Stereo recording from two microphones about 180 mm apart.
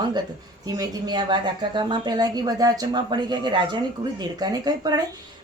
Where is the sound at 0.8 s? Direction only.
25° right (ahead or behind).